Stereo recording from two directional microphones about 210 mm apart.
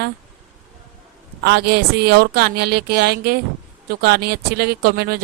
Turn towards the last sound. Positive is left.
turn(degrees=-50)  # may be behind; listen again after turning